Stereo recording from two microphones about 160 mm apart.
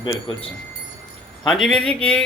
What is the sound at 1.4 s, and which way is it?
Speech, centre (ahead or behind).